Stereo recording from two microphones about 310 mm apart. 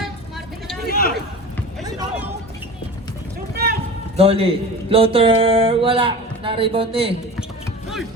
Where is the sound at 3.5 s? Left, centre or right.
Right.